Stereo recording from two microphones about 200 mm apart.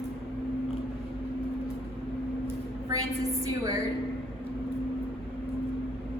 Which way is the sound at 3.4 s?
15° right (ahead or behind).